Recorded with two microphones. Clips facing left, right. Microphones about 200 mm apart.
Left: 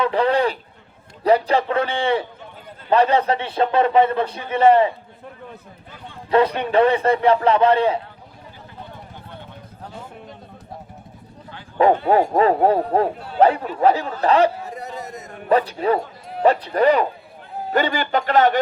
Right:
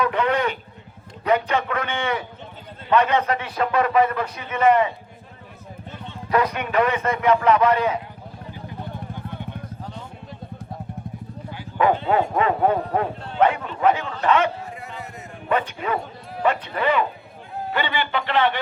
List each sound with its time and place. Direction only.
0.0 s speech: 30° left (ahead or behind)
6.3 s speech: 30° left (ahead or behind)
12.0 s speech: 35° left (ahead or behind)
13.1 s a man's voice: 5° left (ahead or behind)
13.8 s a man's voice: 35° left (ahead or behind)